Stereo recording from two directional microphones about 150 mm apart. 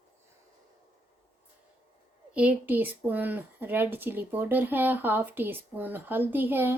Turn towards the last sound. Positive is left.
turn(degrees=-15)  # may be behind; listen again after turning